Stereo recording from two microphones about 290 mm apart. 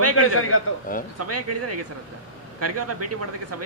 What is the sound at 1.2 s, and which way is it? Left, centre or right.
A man's voice, right.